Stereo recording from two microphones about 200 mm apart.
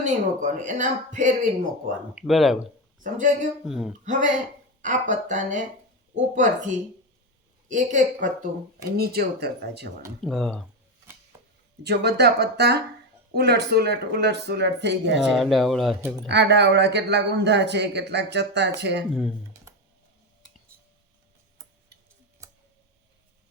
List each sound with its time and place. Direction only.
0.0 s speech: 40° right (ahead or behind)
2.1 s speech: centre (ahead or behind)
3.0 s speech: 40° right (ahead or behind)
3.7 s speech: centre (ahead or behind)
4.8 s speech: 40° right (ahead or behind)
9.0 s speech: 50° right (ahead or behind)
10.2 s speech: centre (ahead or behind)
11.0 s a sound: 10° right (ahead or behind)
11.8 s a man's voice: 55° right (ahead or behind)
15.1 s speech: centre (ahead or behind)
16.2 s a man's voice: 60° right (ahead or behind)
22.4 s tick: 15° right (ahead or behind)